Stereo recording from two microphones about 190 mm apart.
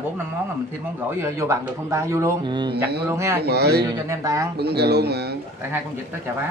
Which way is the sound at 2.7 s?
55° right (ahead or behind).